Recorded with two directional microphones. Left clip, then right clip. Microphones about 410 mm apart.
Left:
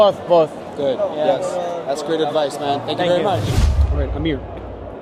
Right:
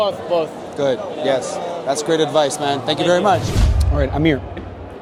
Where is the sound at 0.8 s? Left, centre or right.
Right.